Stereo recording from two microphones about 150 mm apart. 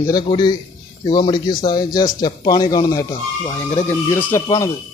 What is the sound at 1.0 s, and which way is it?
Speech, 30° left (ahead or behind).